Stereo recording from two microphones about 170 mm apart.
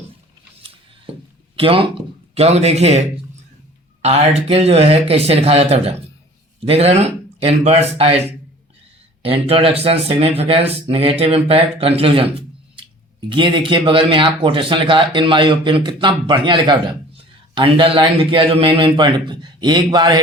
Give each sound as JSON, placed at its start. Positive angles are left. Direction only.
{"t": 1.5, "sound": "speech", "side_deg": -35}
{"t": 4.0, "sound": "speech", "side_deg": -40}
{"t": 9.2, "sound": "speech", "side_deg": -35}
{"t": 13.3, "sound": "speech", "side_deg": -30}